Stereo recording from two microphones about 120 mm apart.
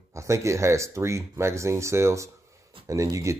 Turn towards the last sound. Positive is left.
turn(degrees=-25)  # may be behind; listen again after turning